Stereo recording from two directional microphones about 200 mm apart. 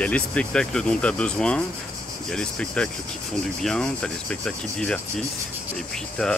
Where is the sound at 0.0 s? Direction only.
5° left (ahead or behind).